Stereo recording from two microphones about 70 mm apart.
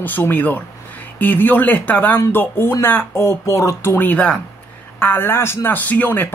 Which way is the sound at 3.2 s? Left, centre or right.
Left.